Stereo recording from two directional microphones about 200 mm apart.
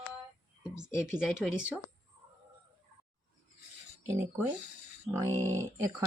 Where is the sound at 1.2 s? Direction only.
5° right (ahead or behind).